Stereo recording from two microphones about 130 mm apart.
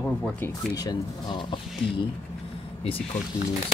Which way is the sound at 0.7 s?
30° left (ahead or behind).